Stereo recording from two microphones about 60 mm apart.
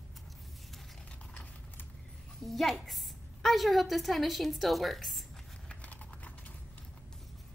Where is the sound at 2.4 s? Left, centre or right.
Centre.